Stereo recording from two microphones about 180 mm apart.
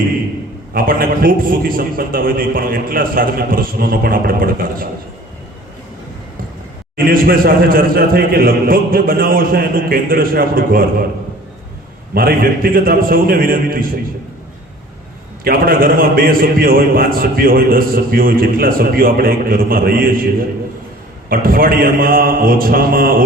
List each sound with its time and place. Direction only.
0.7 s a man's voice: 55° right (ahead or behind)
6.9 s a man's voice: 55° right (ahead or behind)
12.1 s a man's voice: 55° right (ahead or behind)
15.4 s a man's voice: 55° right (ahead or behind)
21.2 s a man's voice: 55° right (ahead or behind)